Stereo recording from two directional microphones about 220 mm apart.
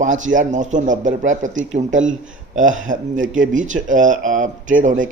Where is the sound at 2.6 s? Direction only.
35° right (ahead or behind).